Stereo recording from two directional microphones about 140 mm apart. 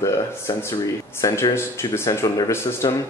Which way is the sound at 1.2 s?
20° left (ahead or behind).